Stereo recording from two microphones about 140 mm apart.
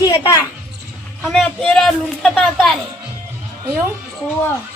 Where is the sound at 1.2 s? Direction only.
Centre (ahead or behind).